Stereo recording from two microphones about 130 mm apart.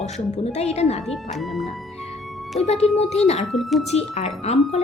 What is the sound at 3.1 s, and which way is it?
Speech, 55° left (ahead or behind).